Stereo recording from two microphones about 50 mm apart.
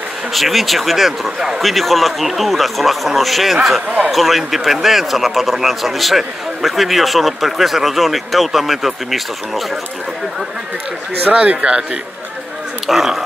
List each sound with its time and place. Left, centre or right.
0.3 s speech: centre
11.3 s speech: right
12.8 s speech: centre